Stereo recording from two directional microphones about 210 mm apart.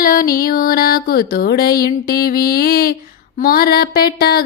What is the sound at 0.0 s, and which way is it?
Mantra, 45° left (ahead or behind).